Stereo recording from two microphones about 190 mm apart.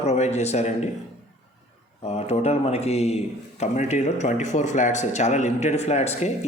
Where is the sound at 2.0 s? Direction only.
35° left (ahead or behind).